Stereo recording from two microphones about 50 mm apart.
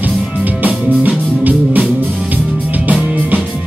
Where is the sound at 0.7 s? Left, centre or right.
Right.